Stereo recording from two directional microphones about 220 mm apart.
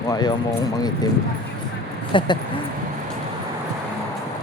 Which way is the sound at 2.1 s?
20° left (ahead or behind).